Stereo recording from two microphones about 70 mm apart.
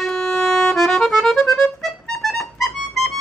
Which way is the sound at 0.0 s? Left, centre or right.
Centre.